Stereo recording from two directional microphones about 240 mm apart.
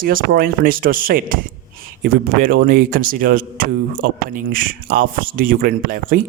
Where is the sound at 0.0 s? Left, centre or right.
Right.